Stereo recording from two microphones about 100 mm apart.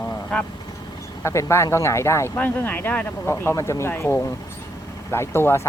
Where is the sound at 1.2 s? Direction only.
30° left (ahead or behind).